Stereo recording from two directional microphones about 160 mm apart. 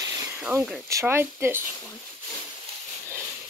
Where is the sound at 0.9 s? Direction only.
15° right (ahead or behind).